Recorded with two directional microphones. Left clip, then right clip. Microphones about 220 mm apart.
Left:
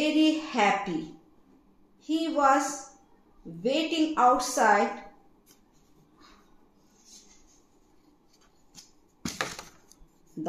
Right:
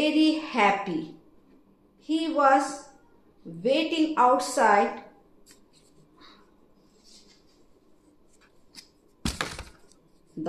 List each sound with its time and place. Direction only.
0.0 s a sound: 35° left (ahead or behind)
2.0 s a woman's voice: 35° left (ahead or behind)
10.4 s speech: 35° left (ahead or behind)